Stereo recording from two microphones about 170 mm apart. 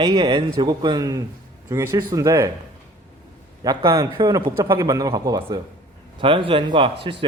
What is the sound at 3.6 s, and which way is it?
Speech, 20° right (ahead or behind).